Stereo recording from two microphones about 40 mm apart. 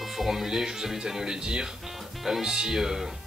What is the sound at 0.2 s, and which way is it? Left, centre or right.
Speech, centre.